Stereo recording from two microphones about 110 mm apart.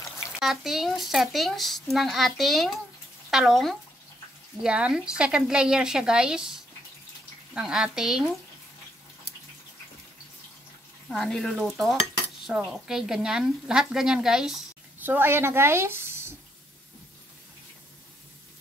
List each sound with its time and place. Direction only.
0.4 s speech: centre (ahead or behind)
11.1 s speech: 5° left (ahead or behind)
12.4 s speech: 5° right (ahead or behind)
15.0 s a woman's voice: 20° right (ahead or behind)